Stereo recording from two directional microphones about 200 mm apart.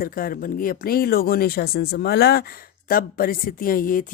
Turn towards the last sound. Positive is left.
turn(degrees=45)  # may be behind; listen again after turning